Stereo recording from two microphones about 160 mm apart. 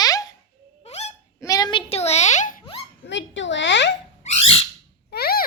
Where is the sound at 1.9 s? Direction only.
40° left (ahead or behind).